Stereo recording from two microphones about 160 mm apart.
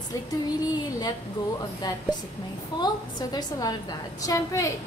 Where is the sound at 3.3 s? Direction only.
25° left (ahead or behind).